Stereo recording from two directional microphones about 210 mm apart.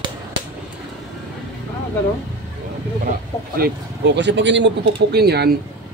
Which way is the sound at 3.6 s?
55° right (ahead or behind).